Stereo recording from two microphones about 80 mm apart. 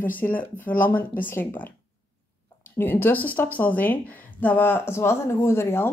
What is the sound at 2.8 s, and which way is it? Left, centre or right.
Speech, left.